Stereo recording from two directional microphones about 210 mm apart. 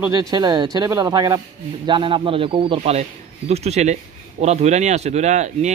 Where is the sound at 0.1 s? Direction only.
20° right (ahead or behind).